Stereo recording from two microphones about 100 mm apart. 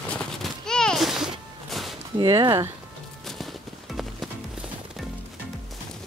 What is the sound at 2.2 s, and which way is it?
Speech, 45° right (ahead or behind).